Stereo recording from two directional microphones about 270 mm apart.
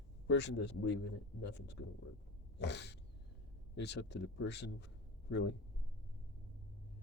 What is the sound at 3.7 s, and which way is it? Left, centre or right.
Speech, left.